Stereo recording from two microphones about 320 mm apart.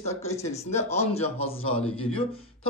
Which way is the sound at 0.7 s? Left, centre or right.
Centre.